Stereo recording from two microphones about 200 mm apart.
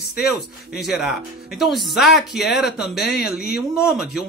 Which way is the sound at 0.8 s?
Centre (ahead or behind).